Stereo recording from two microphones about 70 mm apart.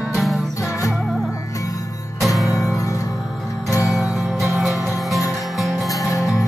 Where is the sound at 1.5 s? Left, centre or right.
Left.